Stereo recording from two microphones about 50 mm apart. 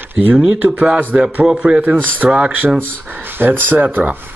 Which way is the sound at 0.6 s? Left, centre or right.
Right.